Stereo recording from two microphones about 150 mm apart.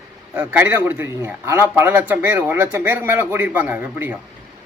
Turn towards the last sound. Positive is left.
turn(degrees=-10)  # may be behind; listen again after turning